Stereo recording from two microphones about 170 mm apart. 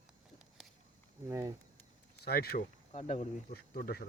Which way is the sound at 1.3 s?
15° right (ahead or behind).